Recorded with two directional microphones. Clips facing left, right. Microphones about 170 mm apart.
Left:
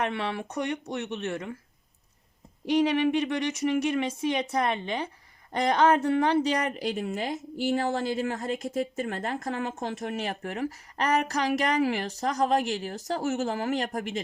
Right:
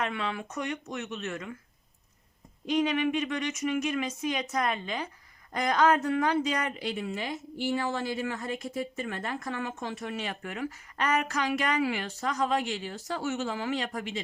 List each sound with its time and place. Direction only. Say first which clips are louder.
0.0 s speech: left 3 dB; 35° left (ahead or behind)
2.6 s speech: left 3 dB; 35° left (ahead or behind)